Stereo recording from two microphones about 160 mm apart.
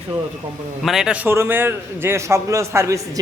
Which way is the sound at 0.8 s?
5° right (ahead or behind).